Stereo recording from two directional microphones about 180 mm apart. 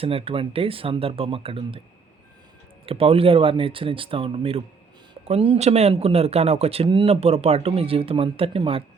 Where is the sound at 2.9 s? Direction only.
30° right (ahead or behind).